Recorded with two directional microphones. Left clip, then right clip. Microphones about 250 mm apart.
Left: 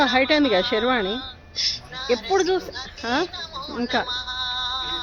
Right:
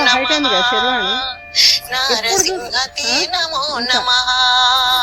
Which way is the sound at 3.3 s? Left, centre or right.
Right.